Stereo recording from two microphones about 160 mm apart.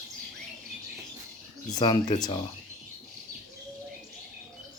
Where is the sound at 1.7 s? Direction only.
25° left (ahead or behind).